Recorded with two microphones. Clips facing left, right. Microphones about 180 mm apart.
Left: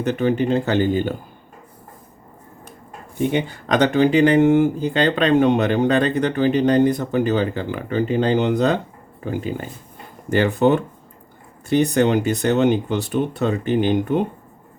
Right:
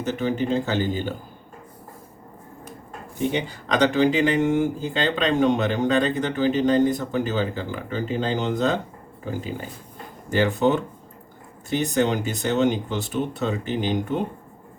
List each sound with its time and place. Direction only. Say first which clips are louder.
0.0 s speech: left 5 dB; 60° left (ahead or behind)
3.2 s speech: left 4 dB; 55° left (ahead or behind)